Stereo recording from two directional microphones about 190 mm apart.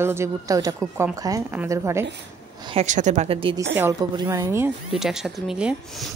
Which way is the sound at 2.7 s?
35° right (ahead or behind).